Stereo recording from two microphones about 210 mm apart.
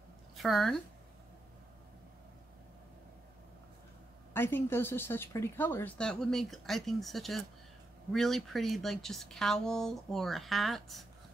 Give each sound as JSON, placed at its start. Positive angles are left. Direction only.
{"t": 0.4, "sound": "a woman's voice", "side_deg": 0}
{"t": 4.3, "sound": "a woman's voice", "side_deg": 10}